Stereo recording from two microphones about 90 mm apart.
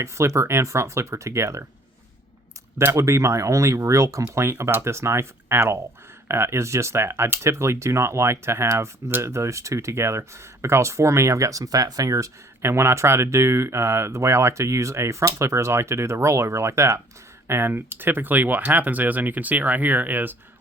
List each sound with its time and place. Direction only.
0.0 s speech: 35° right (ahead or behind)
2.7 s speech: 30° right (ahead or behind)